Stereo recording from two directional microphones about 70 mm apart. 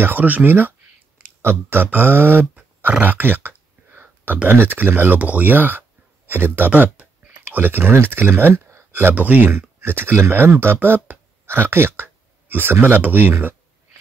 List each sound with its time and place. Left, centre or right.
0.0 s speech: right
2.8 s a sound: right
4.5 s speech: right